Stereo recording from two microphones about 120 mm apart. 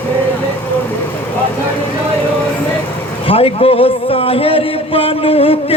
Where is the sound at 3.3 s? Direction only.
55° left (ahead or behind).